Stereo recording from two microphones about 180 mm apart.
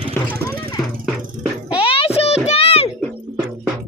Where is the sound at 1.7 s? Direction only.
30° left (ahead or behind).